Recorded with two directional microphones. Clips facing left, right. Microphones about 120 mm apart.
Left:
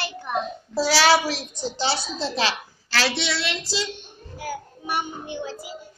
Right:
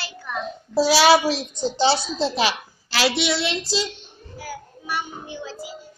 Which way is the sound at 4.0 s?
50° left (ahead or behind).